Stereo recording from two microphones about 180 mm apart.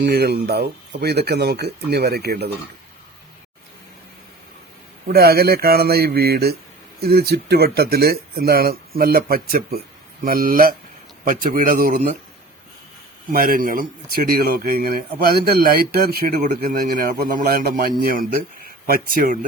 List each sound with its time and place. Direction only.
0.0 s speech: 65° right (ahead or behind)
5.0 s speech: 60° right (ahead or behind)
13.3 s speech: 55° right (ahead or behind)